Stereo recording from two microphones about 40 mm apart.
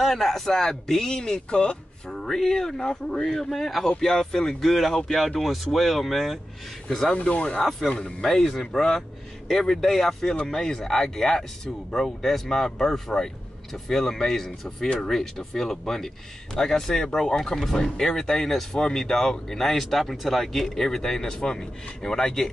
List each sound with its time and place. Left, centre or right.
0.0 s speech: centre; by 1.8 s left
2.0 s speech: centre
4.6 s speech: centre
6.9 s speech: centre
7.2 s speech: left
8.2 s speech: centre